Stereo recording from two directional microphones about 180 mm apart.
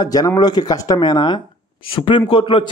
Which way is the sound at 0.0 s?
20° left (ahead or behind).